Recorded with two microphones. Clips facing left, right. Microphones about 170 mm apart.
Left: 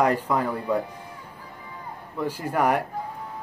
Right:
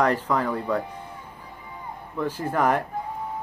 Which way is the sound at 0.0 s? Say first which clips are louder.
Even; 10° left (ahead or behind).